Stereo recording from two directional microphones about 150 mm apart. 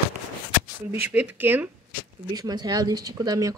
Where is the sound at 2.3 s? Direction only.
25° right (ahead or behind).